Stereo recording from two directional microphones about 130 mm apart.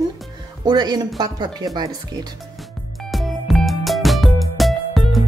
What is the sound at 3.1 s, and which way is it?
Music, centre (ahead or behind).